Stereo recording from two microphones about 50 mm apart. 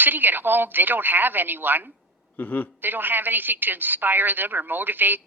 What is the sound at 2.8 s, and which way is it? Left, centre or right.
A woman's voice, right.